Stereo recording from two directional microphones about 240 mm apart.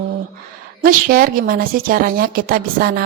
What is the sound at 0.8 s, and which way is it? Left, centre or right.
A woman's voice, right.